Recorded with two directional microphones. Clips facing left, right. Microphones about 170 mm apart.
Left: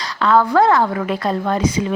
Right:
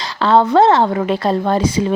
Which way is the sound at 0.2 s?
25° right (ahead or behind).